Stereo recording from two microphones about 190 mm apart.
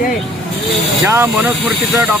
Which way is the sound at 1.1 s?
10° right (ahead or behind).